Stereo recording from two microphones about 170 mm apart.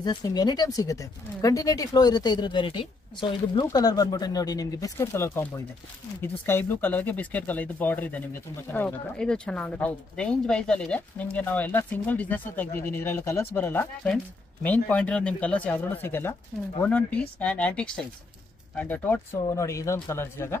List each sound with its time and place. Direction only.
0.0 s speech: 25° left (ahead or behind)